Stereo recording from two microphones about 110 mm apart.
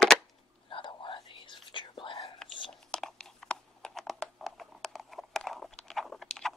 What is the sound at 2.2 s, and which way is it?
Whispering, 5° left (ahead or behind).